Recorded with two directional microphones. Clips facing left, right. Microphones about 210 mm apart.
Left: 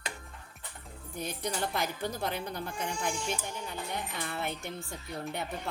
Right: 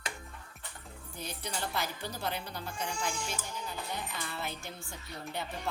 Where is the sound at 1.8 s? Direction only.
50° left (ahead or behind).